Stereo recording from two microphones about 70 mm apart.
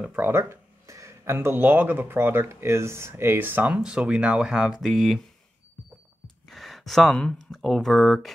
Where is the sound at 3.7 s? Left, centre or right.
Centre.